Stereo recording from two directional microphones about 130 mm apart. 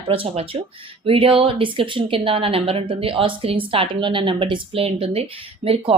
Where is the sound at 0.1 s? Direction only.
45° right (ahead or behind).